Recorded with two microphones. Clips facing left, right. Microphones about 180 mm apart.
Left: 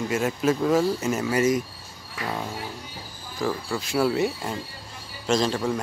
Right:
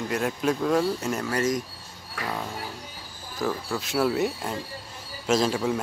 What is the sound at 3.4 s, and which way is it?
Speech, centre (ahead or behind).